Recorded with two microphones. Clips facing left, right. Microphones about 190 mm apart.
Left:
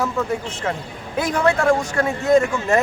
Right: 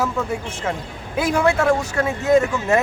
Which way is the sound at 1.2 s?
5° right (ahead or behind).